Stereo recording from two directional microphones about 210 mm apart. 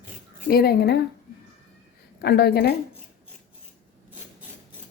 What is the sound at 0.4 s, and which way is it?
Speech, 45° left (ahead or behind).